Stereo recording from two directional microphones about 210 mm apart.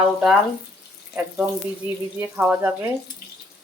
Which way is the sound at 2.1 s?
10° right (ahead or behind).